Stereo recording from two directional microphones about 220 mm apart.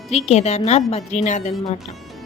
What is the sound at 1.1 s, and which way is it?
Music, 30° left (ahead or behind).